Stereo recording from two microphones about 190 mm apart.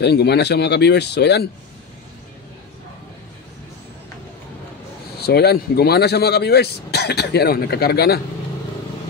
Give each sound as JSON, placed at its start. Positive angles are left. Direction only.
{"t": 0.0, "sound": "speech", "side_deg": 60}
{"t": 5.2, "sound": "speech", "side_deg": 55}